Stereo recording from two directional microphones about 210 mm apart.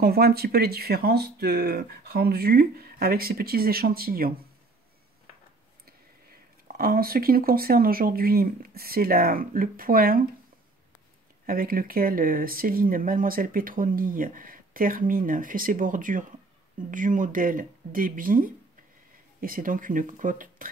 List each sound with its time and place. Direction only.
0.0 s speech: 45° right (ahead or behind)
6.8 s speech: 45° right (ahead or behind)
11.4 s speech: 45° right (ahead or behind)